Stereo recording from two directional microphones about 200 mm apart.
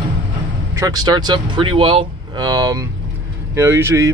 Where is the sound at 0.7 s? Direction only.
20° right (ahead or behind).